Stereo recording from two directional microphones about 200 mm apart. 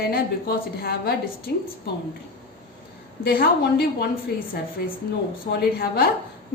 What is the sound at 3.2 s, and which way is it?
A woman's voice, 50° left (ahead or behind).